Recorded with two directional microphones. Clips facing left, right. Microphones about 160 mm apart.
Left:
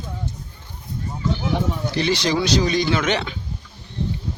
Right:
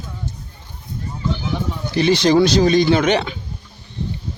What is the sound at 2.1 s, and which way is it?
Speech, 50° right (ahead or behind).